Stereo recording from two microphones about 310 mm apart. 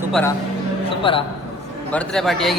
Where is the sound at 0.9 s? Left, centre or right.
Centre.